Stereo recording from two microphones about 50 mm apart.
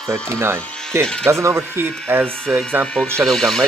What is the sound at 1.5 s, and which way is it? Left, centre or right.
Speech, right.